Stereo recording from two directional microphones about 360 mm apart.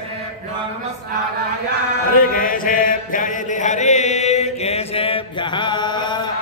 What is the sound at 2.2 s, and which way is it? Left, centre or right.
Mantra, left.